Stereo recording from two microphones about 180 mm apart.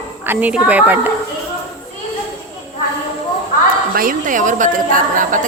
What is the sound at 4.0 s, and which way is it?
A woman's voice, 50° right (ahead or behind).